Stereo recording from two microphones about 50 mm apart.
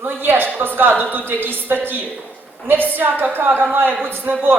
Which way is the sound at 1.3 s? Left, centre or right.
Right.